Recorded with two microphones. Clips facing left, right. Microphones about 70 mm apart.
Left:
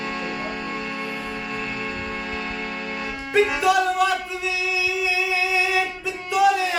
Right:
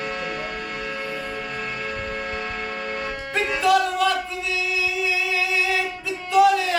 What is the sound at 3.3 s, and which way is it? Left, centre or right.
Music, centre.